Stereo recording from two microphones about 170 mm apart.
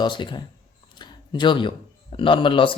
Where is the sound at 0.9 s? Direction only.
25° left (ahead or behind).